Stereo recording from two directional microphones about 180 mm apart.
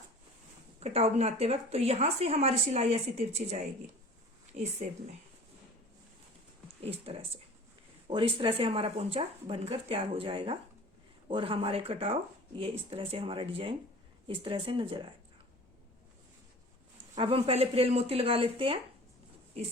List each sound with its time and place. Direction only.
0.8 s a woman's voice: 35° right (ahead or behind)
6.8 s a woman's voice: 35° right (ahead or behind)
17.2 s a woman's voice: 30° right (ahead or behind)